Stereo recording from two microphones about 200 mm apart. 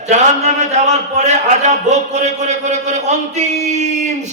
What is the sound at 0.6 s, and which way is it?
A man's voice, 35° right (ahead or behind).